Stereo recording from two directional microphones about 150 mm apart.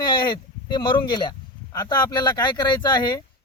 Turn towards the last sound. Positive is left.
turn(degrees=30)  # may be behind; listen again after turning